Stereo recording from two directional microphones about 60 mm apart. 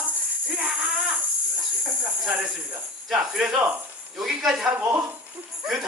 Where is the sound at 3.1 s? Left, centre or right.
Centre.